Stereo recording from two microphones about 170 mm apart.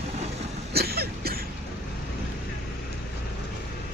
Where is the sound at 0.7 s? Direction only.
65° right (ahead or behind).